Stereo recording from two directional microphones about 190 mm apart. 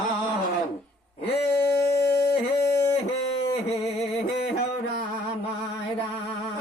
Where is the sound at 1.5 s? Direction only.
15° left (ahead or behind).